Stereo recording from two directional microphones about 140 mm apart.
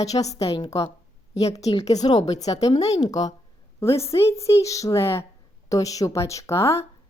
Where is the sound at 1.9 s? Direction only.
30° left (ahead or behind).